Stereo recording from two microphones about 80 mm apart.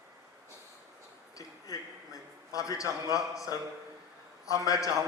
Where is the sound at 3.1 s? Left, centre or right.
Left.